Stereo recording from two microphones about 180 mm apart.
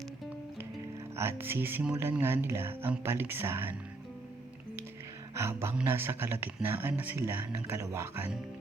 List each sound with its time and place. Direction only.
1.1 s speech: 15° right (ahead or behind)
5.3 s speech: 15° right (ahead or behind)